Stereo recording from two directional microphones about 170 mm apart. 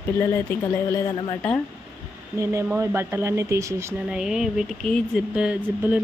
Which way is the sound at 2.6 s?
10° right (ahead or behind).